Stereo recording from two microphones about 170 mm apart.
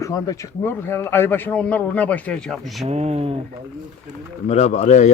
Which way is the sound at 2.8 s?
40° right (ahead or behind).